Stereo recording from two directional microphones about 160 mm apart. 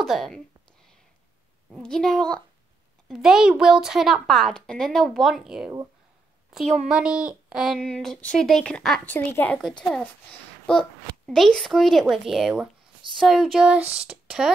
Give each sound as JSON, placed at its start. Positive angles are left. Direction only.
{"t": 0.0, "sound": "speech", "side_deg": 0}
{"t": 1.8, "sound": "speech", "side_deg": 5}
{"t": 13.7, "sound": "speech", "side_deg": -40}
{"t": 14.0, "sound": "speech", "side_deg": -5}